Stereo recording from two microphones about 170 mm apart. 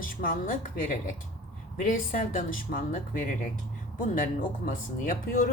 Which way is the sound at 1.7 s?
50° left (ahead or behind).